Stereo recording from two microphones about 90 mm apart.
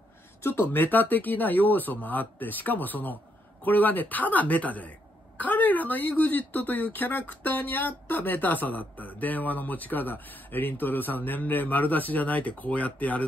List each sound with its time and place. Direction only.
0.4 s speech: 25° left (ahead or behind)